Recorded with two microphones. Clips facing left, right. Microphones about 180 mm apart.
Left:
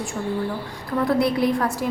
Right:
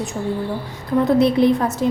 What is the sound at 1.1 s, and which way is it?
Speech, 20° right (ahead or behind).